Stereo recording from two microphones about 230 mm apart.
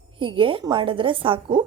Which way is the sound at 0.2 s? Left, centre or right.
Right.